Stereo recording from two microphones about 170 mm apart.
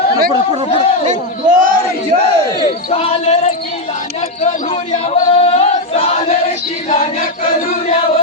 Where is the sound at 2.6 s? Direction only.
35° left (ahead or behind).